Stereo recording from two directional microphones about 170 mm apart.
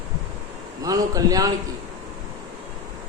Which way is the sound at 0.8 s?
20° right (ahead or behind).